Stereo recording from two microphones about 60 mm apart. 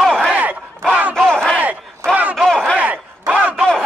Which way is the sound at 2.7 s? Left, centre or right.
Right.